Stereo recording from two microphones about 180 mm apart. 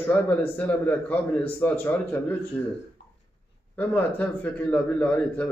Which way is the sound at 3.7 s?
10° left (ahead or behind).